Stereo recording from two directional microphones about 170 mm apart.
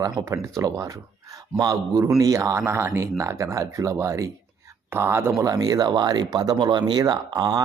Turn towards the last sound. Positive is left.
turn(degrees=-25)  # may be behind; listen again after turning